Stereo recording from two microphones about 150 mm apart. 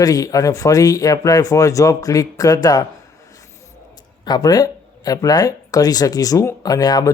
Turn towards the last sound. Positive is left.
turn(degrees=25)  # may be behind; listen again after turning